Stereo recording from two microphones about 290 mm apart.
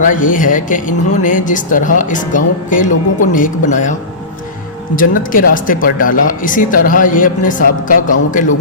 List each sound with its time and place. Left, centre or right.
0.0 s speech: left
4.9 s speech: left